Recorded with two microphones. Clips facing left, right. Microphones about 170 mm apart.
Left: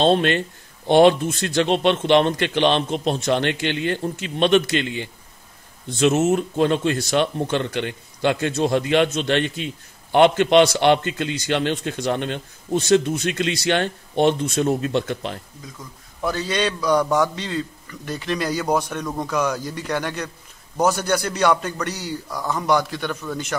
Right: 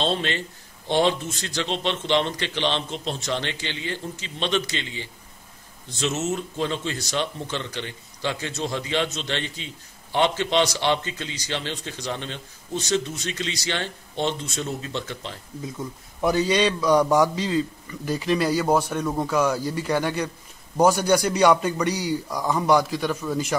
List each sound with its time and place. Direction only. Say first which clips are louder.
0.0 s a man's voice: left 8 dB; 55° left (ahead or behind)
15.8 s a man's voice: right 2 dB; 15° right (ahead or behind)
16.4 s a man's voice: right 1 dB; 5° right (ahead or behind)